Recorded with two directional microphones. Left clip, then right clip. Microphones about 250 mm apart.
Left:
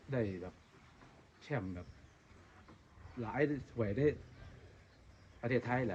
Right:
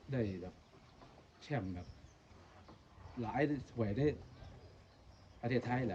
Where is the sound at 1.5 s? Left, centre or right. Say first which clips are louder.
Left 1 dB; centre.